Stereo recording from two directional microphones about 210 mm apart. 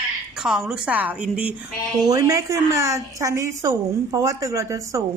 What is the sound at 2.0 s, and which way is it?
A woman's voice, 15° right (ahead or behind).